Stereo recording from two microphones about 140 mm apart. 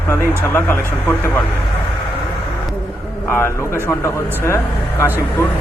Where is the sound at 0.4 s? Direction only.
15° left (ahead or behind).